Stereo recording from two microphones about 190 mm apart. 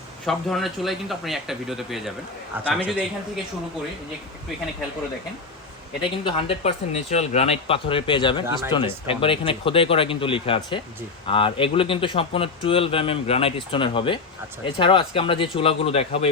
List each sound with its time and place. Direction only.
0.3 s a man's voice: centre (ahead or behind)
6.0 s a man's voice: 25° left (ahead or behind)